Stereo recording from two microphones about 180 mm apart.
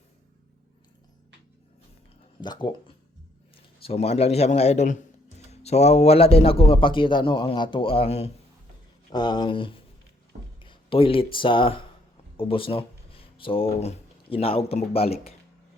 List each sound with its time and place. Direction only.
2.4 s a man's voice: 25° left (ahead or behind)
9.1 s speech: 25° left (ahead or behind)